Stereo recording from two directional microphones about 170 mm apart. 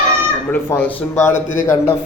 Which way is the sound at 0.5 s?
10° left (ahead or behind).